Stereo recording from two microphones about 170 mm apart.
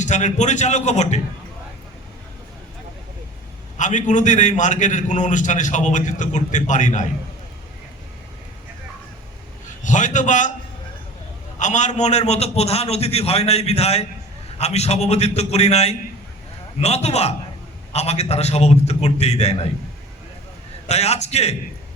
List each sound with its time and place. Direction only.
0.0 s a man's voice: 45° left (ahead or behind)
3.8 s a man's voice: 45° left (ahead or behind)
9.8 s a man's voice: 45° left (ahead or behind)
11.6 s a man's voice: 45° left (ahead or behind)
20.8 s a man's voice: 40° left (ahead or behind)